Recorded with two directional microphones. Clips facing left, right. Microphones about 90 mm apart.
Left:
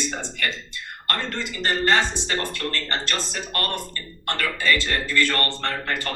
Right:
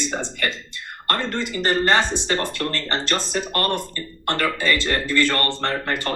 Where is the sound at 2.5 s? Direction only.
30° right (ahead or behind).